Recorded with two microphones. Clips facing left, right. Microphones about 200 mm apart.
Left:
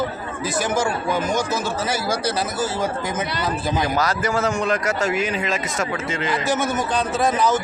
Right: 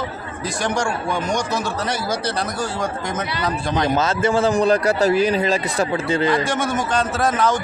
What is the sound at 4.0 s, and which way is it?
A man's voice, 25° right (ahead or behind).